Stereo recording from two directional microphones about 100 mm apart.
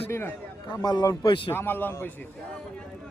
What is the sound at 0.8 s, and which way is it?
Speech, 40° left (ahead or behind).